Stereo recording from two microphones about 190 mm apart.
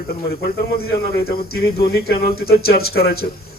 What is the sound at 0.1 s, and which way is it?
Speech, 55° left (ahead or behind).